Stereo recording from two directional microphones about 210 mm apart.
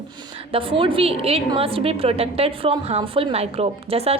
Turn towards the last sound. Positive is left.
turn(degrees=-30)  # may be behind; listen again after turning